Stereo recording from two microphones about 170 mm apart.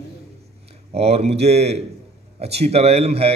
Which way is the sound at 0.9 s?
40° right (ahead or behind).